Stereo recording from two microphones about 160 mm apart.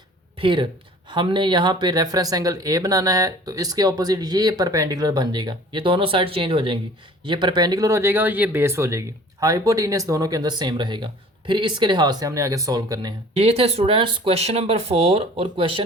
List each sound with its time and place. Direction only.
0.3 s speech: 30° right (ahead or behind)
13.3 s speech: 40° right (ahead or behind)